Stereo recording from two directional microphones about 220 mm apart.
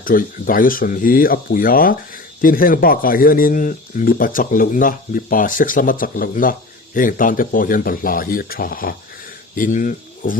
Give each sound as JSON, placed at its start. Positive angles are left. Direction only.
{"t": 0.0, "sound": "speech", "side_deg": 40}